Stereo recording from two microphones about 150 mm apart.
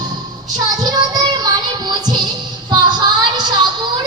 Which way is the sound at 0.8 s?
25° right (ahead or behind).